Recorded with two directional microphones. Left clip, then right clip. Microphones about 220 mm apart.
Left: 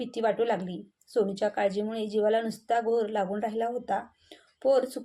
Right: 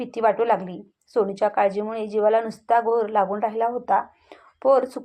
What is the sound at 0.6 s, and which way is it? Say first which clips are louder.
Speech: right 4 dB; 20° right (ahead or behind).